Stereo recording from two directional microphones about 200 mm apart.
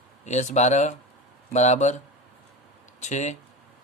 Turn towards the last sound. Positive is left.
turn(degrees=35)  # may be behind; listen again after turning